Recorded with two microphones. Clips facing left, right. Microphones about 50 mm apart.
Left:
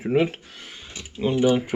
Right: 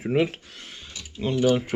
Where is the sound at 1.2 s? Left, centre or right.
Centre.